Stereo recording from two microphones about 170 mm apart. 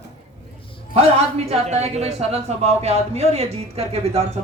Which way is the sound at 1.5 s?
40° right (ahead or behind).